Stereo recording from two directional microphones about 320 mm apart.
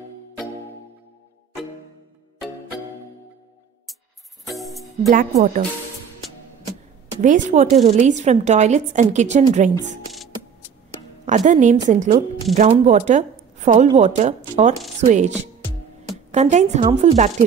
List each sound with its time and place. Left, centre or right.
4.5 s music: centre
5.3 s a woman's voice: centre
7.2 s a woman's voice: right
11.2 s a woman's voice: right